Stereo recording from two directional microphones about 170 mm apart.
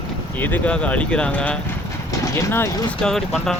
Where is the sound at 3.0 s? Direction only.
5° left (ahead or behind).